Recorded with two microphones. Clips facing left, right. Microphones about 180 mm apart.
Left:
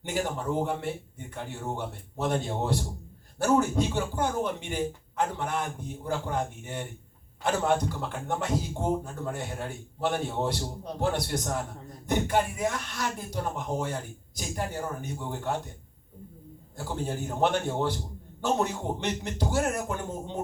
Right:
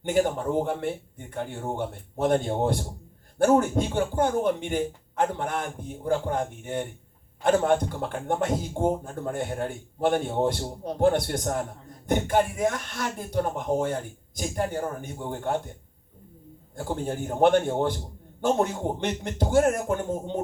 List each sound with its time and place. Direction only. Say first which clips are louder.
0.0 s speech: right 7 dB; 50° right (ahead or behind)
17.2 s speech: right 7 dB; 50° right (ahead or behind)